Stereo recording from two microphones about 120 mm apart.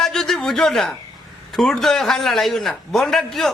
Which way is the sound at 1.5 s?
Centre (ahead or behind).